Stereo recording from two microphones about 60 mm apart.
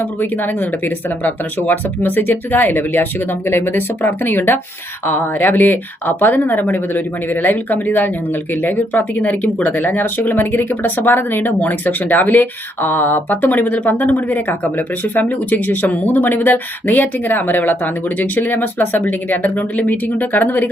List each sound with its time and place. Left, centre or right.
0.2 s speech: left